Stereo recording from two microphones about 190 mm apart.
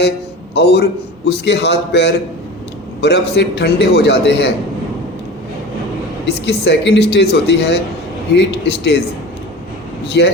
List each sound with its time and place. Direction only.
0.5 s a man's voice: 60° left (ahead or behind)
6.2 s a man's voice: 65° left (ahead or behind)
10.1 s a man's voice: 60° left (ahead or behind)